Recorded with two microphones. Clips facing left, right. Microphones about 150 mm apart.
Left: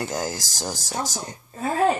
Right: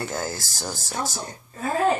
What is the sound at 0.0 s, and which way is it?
Speech, 15° left (ahead or behind).